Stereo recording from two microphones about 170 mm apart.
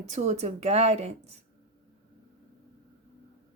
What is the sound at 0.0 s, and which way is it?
A woman's voice, 40° right (ahead or behind).